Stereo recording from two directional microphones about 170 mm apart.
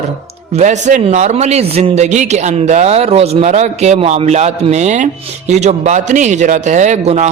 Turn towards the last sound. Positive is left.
turn(degrees=-40)  # may be behind; listen again after turning